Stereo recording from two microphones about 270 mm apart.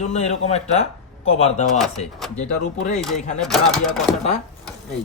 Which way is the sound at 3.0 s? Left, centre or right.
Centre.